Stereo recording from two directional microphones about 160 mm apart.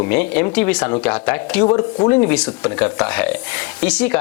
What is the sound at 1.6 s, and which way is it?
Speech, 25° left (ahead or behind).